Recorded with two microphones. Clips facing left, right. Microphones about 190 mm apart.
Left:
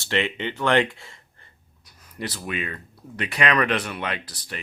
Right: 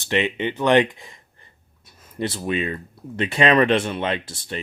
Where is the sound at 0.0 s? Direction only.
15° right (ahead or behind).